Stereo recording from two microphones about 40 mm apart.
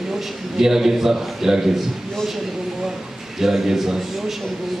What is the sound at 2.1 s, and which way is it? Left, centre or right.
Speech, centre.